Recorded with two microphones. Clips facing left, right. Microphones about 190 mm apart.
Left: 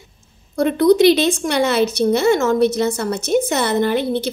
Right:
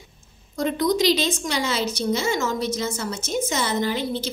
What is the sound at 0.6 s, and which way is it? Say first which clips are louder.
Speech: left 9 dB; 60° left (ahead or behind).